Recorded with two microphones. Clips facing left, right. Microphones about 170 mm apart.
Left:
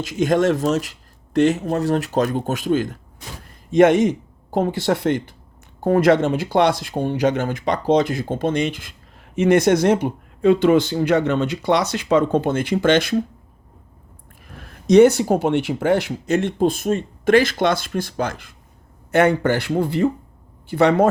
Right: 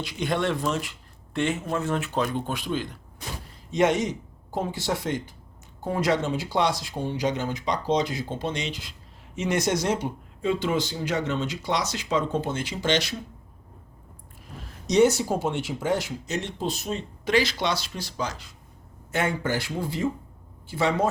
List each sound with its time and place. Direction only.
0.0 s speech: 45° left (ahead or behind)
14.4 s speech: 60° left (ahead or behind)
19.1 s speech: 65° left (ahead or behind)